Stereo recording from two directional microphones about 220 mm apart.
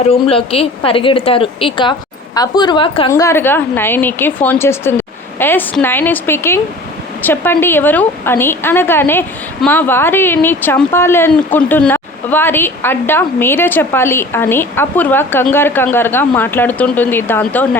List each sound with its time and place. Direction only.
0.0 s speech: 25° left (ahead or behind)
3.1 s a woman's voice: 15° left (ahead or behind)